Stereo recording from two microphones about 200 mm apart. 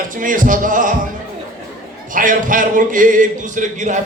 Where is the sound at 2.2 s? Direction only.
40° right (ahead or behind).